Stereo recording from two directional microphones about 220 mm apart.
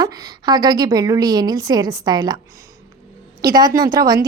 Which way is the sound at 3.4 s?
15° right (ahead or behind).